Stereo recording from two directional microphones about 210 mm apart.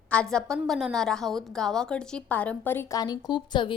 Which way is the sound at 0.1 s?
5° left (ahead or behind).